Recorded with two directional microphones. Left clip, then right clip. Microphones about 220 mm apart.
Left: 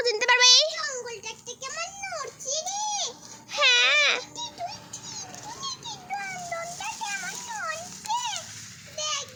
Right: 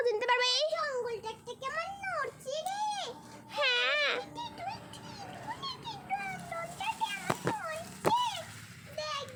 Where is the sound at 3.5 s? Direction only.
30° left (ahead or behind).